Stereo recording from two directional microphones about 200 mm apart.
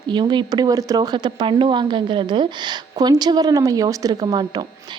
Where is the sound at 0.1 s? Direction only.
20° right (ahead or behind).